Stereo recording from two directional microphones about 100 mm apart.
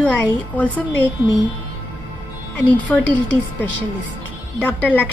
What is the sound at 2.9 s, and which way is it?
Speech, 15° left (ahead or behind).